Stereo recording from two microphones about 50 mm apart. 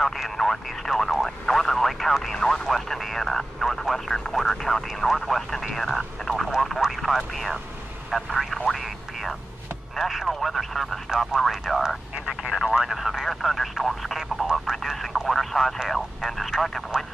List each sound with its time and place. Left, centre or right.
0.0 s speech: centre
2.7 s speech: centre
12.3 s telephone: centre
14.5 s a sound: centre
15.2 s radio: centre
15.9 s speech: centre